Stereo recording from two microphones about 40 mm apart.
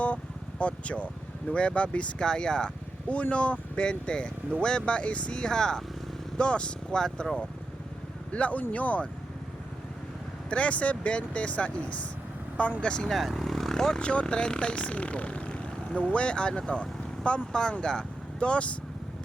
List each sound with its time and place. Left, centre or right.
0.6 s speech: left
2.2 s speech: centre
3.1 s speech: left
8.3 s speech: left
10.5 s speech: left
12.8 s speech: left
13.1 s speech: centre
14.0 s speech: left